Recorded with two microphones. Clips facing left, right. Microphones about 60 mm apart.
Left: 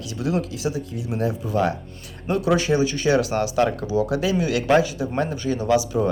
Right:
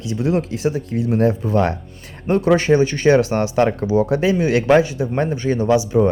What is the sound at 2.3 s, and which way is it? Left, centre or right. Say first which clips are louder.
Speech: right 5 dB; right.